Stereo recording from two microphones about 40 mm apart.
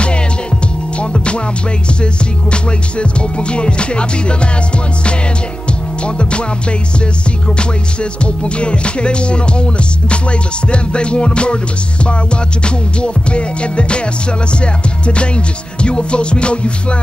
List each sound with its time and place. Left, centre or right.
0.9 s music: left
2.5 s music: left
6.0 s music: left
7.4 s music: left